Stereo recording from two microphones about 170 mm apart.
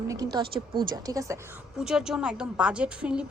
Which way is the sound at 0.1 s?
20° right (ahead or behind).